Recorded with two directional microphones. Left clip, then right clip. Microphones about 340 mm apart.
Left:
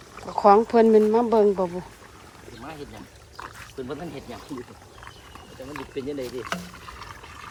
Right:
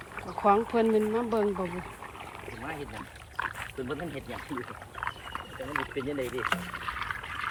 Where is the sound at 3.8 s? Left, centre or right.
Centre.